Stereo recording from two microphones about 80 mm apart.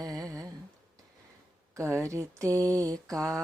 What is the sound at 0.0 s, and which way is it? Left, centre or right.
Humming, right.